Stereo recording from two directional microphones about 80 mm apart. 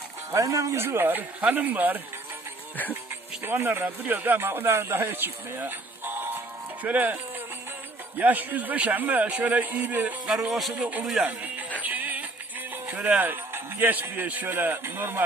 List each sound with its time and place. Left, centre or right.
0.3 s a man's voice: right
3.4 s a man's voice: right
8.2 s a man's voice: right
10.5 s speech: centre
11.2 s speech: centre
11.8 s music: right
12.9 s a man's voice: centre